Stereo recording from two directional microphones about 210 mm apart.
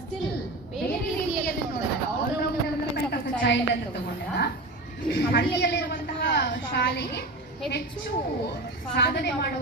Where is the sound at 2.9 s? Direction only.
55° left (ahead or behind).